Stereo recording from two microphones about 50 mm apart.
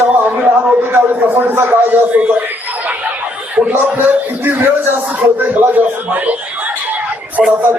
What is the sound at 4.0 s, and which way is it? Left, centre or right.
Speech, right.